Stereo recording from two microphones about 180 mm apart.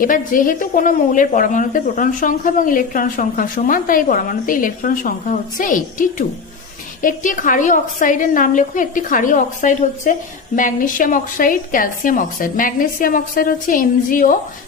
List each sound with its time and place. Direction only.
0.0 s a woman's voice: 50° left (ahead or behind)